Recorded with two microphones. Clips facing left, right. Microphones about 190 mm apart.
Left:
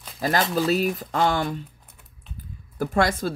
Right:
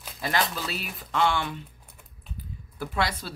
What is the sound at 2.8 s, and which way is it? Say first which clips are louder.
Speech: left 7 dB; 45° left (ahead or behind).